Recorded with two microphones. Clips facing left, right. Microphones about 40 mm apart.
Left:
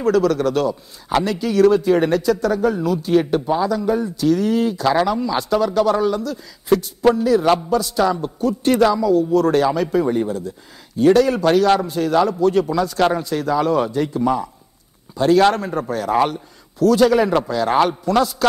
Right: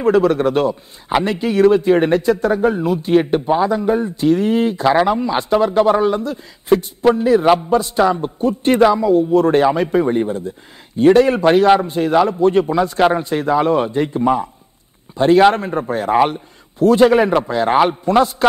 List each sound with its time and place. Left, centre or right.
0.0 s a man's voice: right